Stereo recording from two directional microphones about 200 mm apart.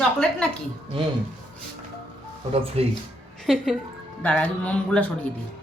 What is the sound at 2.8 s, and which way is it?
Speech, 30° right (ahead or behind).